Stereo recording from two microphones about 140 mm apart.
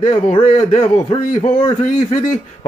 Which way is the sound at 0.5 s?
55° left (ahead or behind).